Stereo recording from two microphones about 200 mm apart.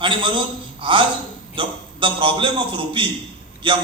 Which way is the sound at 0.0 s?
25° right (ahead or behind).